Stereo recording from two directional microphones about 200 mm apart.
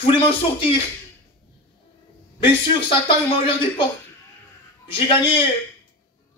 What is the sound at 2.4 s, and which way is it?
Speech, 25° left (ahead or behind).